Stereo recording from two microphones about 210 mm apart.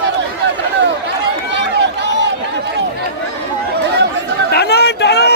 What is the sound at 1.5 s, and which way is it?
Run, 55° right (ahead or behind).